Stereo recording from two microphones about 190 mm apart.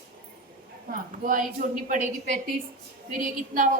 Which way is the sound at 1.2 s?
45° right (ahead or behind).